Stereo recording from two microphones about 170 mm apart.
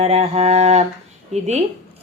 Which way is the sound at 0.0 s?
40° right (ahead or behind).